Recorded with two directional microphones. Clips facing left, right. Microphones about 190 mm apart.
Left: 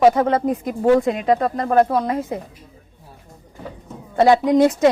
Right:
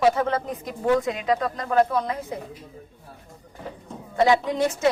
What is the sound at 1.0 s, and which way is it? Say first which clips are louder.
Speech: left 6 dB; 50° left (ahead or behind).